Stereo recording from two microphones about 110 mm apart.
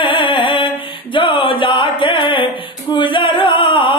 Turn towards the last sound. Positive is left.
turn(degrees=50)  # may be behind; listen again after turning